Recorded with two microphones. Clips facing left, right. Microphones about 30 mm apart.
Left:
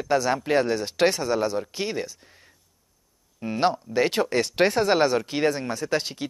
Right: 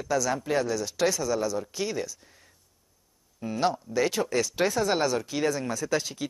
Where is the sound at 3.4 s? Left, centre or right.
Left.